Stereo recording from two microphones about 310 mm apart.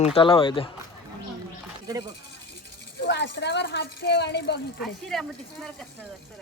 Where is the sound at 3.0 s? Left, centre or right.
Left.